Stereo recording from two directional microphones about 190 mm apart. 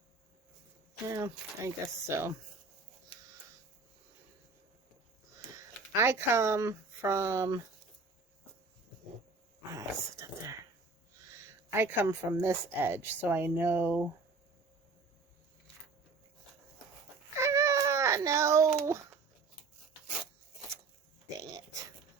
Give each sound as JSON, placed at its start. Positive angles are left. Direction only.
{"t": 1.0, "sound": "speech", "side_deg": -15}
{"t": 6.0, "sound": "speech", "side_deg": -15}
{"t": 9.7, "sound": "speech", "side_deg": -15}
{"t": 17.4, "sound": "baby cry", "side_deg": -15}